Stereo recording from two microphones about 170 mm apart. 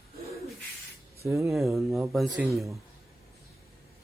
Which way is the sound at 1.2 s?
15° right (ahead or behind).